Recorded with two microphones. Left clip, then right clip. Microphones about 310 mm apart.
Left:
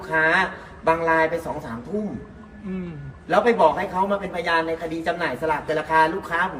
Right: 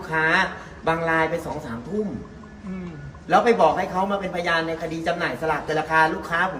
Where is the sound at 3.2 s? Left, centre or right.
Centre.